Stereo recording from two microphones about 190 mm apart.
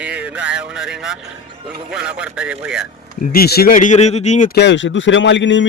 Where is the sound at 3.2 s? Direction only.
50° left (ahead or behind).